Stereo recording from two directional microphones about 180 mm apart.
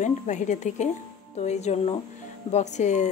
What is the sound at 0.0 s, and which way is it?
A woman's voice, 40° left (ahead or behind).